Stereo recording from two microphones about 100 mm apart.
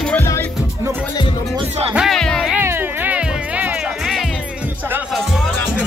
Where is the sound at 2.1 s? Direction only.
5° left (ahead or behind).